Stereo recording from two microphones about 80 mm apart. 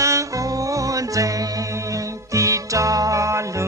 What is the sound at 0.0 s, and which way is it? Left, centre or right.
Music, right.